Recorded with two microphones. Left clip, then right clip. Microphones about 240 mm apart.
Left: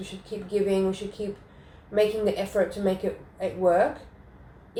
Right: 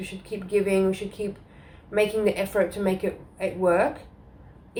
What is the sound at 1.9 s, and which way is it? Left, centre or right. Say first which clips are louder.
Speech: right 1 dB; right.